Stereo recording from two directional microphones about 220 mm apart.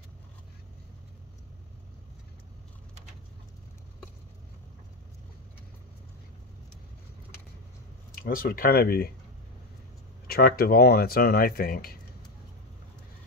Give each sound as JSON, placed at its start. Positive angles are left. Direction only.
{"t": 8.1, "sound": "speech", "side_deg": 40}
{"t": 10.2, "sound": "speech", "side_deg": 45}